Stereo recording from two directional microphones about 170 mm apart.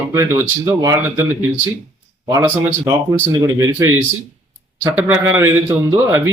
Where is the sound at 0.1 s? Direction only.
15° right (ahead or behind).